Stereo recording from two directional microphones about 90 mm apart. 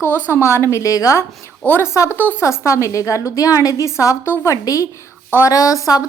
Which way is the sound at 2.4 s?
35° left (ahead or behind).